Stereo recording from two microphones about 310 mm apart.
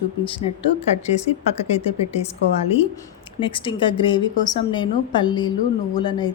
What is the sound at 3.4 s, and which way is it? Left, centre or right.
A woman's voice, centre.